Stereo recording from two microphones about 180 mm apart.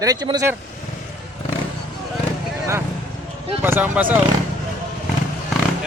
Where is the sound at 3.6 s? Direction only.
10° right (ahead or behind).